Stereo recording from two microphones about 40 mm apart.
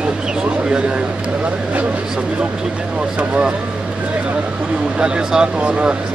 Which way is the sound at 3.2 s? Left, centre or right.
Right.